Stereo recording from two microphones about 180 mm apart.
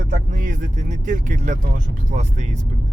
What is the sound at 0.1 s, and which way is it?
Speech, 45° right (ahead or behind).